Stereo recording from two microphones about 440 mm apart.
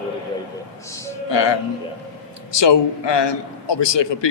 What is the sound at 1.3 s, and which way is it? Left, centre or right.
A man's voice, left.